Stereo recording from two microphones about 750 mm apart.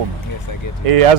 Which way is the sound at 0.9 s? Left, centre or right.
Right.